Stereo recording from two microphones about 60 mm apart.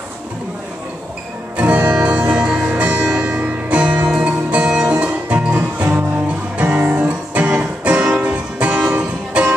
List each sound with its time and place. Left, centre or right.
1.6 s music: right